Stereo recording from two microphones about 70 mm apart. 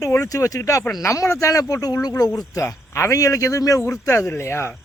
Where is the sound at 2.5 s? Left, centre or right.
Left.